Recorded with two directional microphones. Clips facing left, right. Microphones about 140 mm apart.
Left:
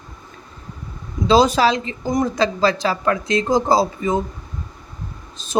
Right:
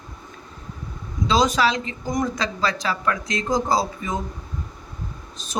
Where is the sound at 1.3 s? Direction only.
30° left (ahead or behind).